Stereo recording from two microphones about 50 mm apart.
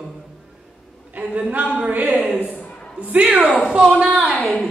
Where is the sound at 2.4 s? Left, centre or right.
Left.